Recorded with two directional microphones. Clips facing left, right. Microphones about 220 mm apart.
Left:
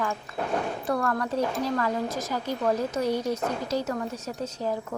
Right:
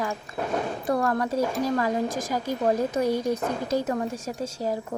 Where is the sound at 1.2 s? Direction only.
45° right (ahead or behind).